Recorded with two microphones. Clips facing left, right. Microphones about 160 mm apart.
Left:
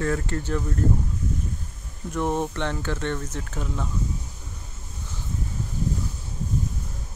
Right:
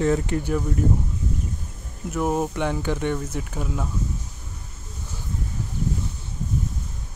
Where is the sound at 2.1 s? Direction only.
5° right (ahead or behind).